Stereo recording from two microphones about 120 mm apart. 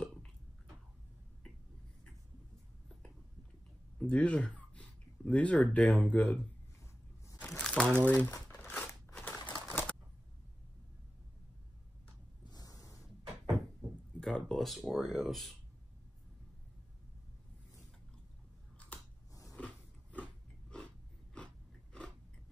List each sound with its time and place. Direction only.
4.0 s speech: 10° left (ahead or behind)
7.4 s crumpling: 5° left (ahead or behind)
8.0 s speech: 15° left (ahead or behind)
8.5 s a sound: 15° left (ahead or behind)
12.4 s a sound: 30° left (ahead or behind)
13.0 s cupboard open or close: centre (ahead or behind)
14.2 s speech: 5° left (ahead or behind)
19.5 s biting: 10° left (ahead or behind)
20.7 s a sound: 10° left (ahead or behind)